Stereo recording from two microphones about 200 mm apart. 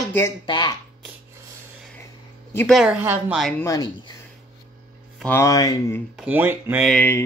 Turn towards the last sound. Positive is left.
turn(degrees=10)  # may be behind; listen again after turning